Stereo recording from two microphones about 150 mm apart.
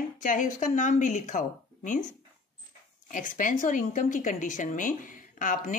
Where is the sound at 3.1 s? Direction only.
60° left (ahead or behind).